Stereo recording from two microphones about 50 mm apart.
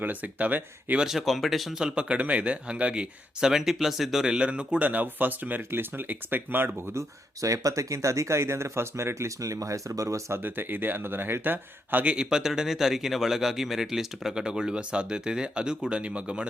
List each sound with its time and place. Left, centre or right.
0.0 s speech: right
1.0 s speech: centre
1.8 s speech: right
3.5 s speech: centre
4.3 s speech: centre
4.8 s speech: right
7.4 s speech: right
10.3 s speech: right
12.0 s speech: centre